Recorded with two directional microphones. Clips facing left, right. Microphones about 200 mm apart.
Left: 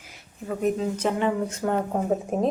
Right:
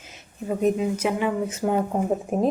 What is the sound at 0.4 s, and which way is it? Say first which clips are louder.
Speech: right 3 dB; 20° right (ahead or behind).